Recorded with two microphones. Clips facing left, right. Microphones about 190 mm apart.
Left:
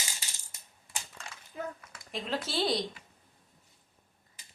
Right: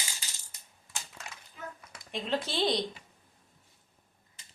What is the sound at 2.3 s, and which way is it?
Speech, centre (ahead or behind).